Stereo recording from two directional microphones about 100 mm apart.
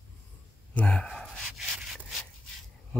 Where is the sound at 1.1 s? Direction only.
Centre (ahead or behind).